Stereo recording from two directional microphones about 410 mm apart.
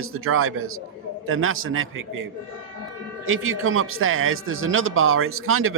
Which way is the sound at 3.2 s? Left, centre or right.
Right.